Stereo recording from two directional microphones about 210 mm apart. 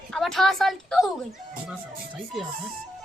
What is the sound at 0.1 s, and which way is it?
Speech, centre (ahead or behind).